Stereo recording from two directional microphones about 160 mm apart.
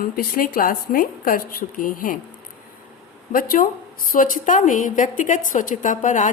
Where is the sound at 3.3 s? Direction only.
60° left (ahead or behind).